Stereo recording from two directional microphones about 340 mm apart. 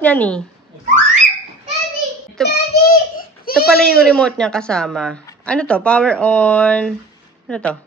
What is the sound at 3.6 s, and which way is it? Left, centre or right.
Speech, centre.